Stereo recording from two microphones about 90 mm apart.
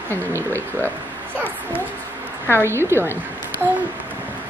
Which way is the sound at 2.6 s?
30° right (ahead or behind).